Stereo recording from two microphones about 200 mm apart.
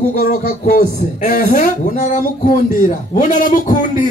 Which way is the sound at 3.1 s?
40° left (ahead or behind).